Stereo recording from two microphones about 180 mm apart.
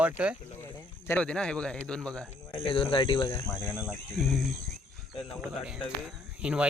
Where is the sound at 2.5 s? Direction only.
30° left (ahead or behind).